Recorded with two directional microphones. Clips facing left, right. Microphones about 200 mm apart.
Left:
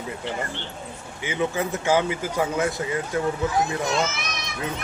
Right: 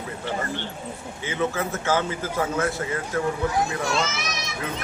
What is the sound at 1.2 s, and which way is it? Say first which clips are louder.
A man's voice: left 1 dB; 15° left (ahead or behind).